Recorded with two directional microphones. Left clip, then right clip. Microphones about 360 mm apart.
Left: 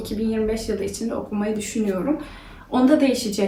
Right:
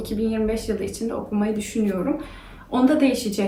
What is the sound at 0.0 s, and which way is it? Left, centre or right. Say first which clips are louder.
Speech: even; centre.